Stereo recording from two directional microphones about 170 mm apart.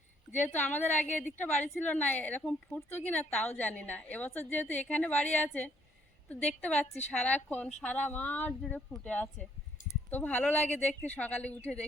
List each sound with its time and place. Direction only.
0.3 s a woman's voice: 10° left (ahead or behind)